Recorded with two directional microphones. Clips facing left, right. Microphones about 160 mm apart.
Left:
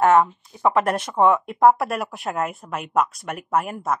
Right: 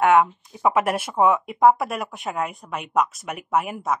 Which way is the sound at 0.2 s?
5° right (ahead or behind).